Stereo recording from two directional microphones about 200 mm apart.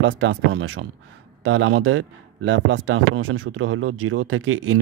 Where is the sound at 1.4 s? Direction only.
90° right.